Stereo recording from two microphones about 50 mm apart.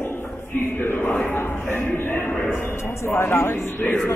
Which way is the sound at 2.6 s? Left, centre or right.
Left.